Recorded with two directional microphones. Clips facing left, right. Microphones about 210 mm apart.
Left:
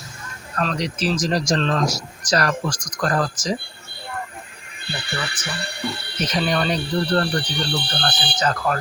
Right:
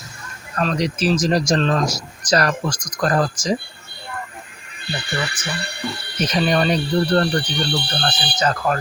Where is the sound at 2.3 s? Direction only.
25° right (ahead or behind).